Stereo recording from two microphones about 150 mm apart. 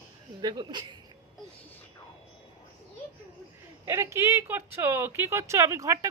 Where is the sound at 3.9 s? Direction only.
20° right (ahead or behind).